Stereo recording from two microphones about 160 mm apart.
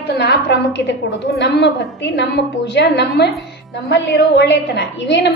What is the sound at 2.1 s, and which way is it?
A woman's voice, 90° left.